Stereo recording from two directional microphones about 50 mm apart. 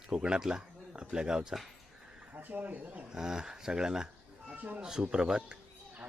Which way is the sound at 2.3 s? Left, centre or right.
Right.